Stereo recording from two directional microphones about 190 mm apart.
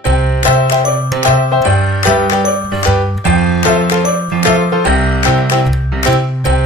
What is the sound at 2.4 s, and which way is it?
Music, centre (ahead or behind).